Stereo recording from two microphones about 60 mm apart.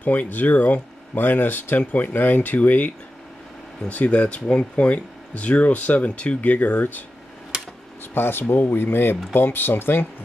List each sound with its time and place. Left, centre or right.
0.0 s speech: left
8.1 s speech: left